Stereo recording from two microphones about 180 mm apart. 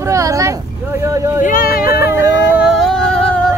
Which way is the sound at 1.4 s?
50° left (ahead or behind).